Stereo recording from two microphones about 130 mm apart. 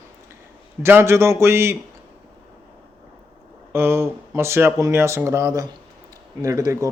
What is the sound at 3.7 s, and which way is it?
A man's voice, 20° right (ahead or behind).